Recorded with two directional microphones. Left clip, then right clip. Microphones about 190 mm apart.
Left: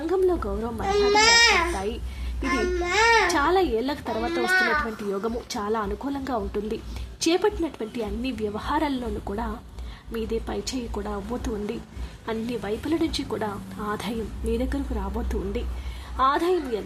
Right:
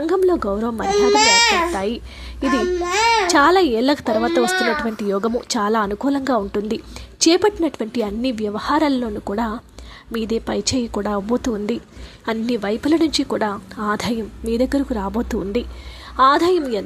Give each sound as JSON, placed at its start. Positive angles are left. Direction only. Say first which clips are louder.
{"t": 0.1, "sound": "a sound", "louder": "right 5 dB", "side_deg": -35}
{"t": 0.8, "sound": "a child's voice", "louder": "right 4 dB", "side_deg": -55}
{"t": 1.7, "sound": "a woman's voice", "louder": "right 7 dB", "side_deg": -35}
{"t": 2.4, "sound": "a child's voice", "louder": "right 6 dB", "side_deg": -60}
{"t": 3.2, "sound": "a woman's voice", "louder": "right 8 dB", "side_deg": -35}
{"t": 4.1, "sound": "a child's voice", "louder": "right 2 dB", "side_deg": -60}
{"t": 5.1, "sound": "a woman's voice", "louder": "right 11 dB", "side_deg": -35}